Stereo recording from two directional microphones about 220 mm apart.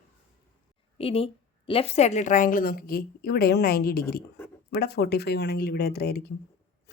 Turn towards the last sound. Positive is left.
turn(degrees=45)  # may be behind; listen again after turning